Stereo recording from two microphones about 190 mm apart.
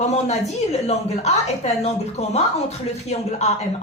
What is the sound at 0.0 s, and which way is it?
A woman's voice, 35° left (ahead or behind).